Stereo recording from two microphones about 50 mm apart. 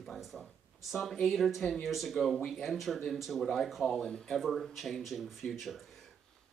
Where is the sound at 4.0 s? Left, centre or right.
Centre.